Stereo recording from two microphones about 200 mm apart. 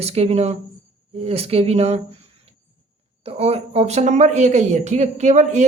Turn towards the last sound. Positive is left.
turn(degrees=-35)  # may be behind; listen again after turning